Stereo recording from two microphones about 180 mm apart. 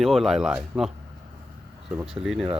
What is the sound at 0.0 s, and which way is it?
Speech, centre (ahead or behind).